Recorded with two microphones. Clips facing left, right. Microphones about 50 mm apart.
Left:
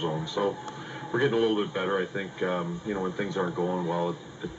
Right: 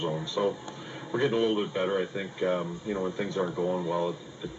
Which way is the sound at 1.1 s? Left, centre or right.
Centre.